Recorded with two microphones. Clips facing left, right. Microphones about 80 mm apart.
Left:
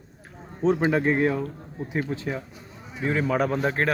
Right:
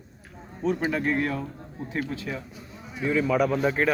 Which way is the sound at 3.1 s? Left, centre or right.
Left.